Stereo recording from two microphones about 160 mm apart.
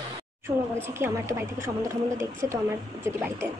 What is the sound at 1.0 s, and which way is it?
Speech, 15° right (ahead or behind).